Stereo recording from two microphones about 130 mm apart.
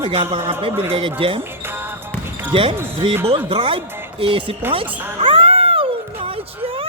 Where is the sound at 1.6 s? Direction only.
15° right (ahead or behind).